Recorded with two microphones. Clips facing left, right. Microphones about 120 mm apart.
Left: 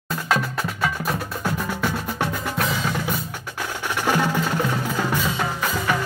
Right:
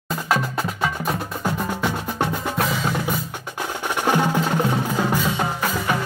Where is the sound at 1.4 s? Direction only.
15° right (ahead or behind).